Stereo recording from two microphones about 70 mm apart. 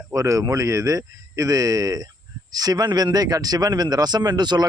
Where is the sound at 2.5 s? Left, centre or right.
Right.